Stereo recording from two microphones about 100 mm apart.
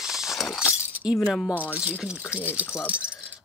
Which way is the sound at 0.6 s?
10° right (ahead or behind).